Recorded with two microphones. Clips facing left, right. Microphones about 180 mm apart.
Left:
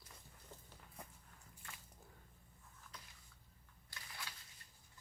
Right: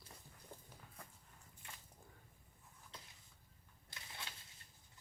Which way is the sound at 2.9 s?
25° right (ahead or behind).